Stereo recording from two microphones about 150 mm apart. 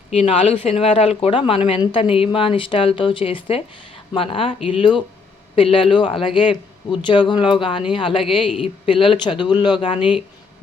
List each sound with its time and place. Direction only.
0.1 s speech: 40° left (ahead or behind)